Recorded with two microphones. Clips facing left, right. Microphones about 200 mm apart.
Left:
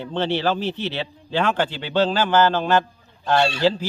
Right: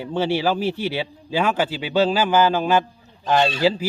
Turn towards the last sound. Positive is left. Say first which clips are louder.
# even
turn(degrees=-10)  # may be behind; listen again after turning